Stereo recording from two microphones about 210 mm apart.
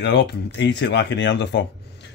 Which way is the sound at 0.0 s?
55° left (ahead or behind).